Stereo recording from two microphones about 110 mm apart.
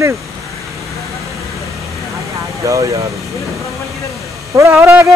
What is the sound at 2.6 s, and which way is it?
Speech, 30° right (ahead or behind).